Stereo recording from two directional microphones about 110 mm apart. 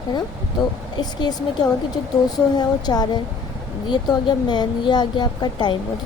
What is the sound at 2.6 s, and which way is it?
A woman's voice, 40° left (ahead or behind).